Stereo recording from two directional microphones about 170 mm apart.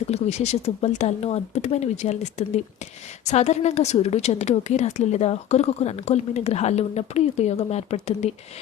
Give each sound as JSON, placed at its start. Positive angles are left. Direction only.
{"t": 0.1, "sound": "a woman's voice", "side_deg": 40}
{"t": 3.2, "sound": "a woman's voice", "side_deg": 40}